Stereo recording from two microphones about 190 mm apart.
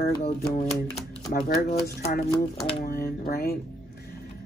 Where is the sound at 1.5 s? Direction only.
50° left (ahead or behind).